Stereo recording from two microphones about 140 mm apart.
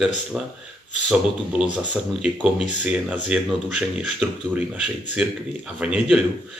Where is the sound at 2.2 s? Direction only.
5° right (ahead or behind).